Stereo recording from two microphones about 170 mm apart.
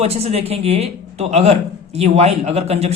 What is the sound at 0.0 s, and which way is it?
Speech, 40° right (ahead or behind).